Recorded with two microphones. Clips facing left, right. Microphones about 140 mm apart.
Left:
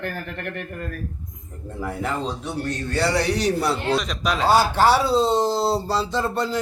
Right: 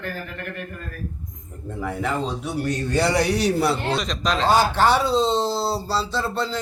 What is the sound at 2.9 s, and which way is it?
Speech, 15° right (ahead or behind).